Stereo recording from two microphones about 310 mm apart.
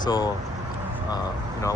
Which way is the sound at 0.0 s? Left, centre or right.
Centre.